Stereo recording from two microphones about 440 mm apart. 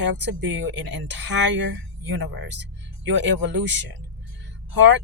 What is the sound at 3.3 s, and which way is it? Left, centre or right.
Speech, right.